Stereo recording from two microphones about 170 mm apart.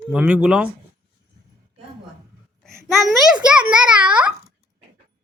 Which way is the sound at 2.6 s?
Centre (ahead or behind).